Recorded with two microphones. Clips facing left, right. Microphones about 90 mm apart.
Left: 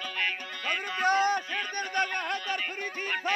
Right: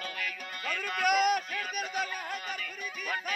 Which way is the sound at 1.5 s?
50° left (ahead or behind).